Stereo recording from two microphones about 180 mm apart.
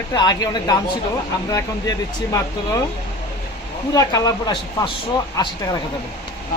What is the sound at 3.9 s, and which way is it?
Speech, 20° left (ahead or behind).